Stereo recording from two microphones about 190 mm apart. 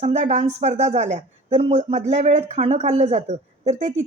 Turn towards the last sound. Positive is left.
turn(degrees=-40)  # may be behind; listen again after turning